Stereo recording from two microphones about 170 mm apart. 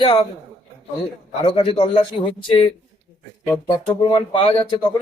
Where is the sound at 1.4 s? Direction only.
30° left (ahead or behind).